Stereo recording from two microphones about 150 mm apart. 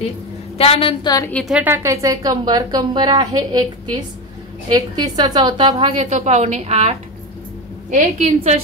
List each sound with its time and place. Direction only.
0.6 s a woman's voice: 40° left (ahead or behind)
1.3 s a woman's voice: centre (ahead or behind)
1.6 s a woman's voice: 15° right (ahead or behind)
4.7 s a woman's voice: 25° right (ahead or behind)
6.0 s a woman's voice: 50° right (ahead or behind)